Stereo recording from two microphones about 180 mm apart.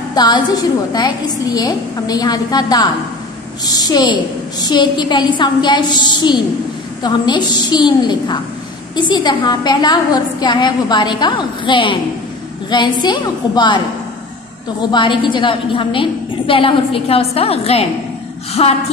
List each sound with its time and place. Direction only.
0.1 s a woman's voice: 25° left (ahead or behind)
14.8 s a woman's voice: 25° left (ahead or behind)